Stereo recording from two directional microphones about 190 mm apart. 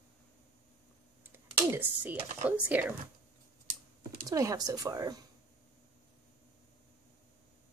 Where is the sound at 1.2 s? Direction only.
10° right (ahead or behind).